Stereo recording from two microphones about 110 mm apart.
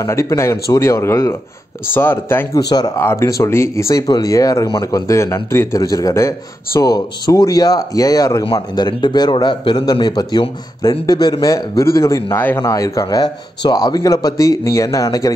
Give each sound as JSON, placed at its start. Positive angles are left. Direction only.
{"t": 0.0, "sound": "speech", "side_deg": 25}
{"t": 2.5, "sound": "speech", "side_deg": 35}
{"t": 3.0, "sound": "speech", "side_deg": 25}
{"t": 12.6, "sound": "speech", "side_deg": 30}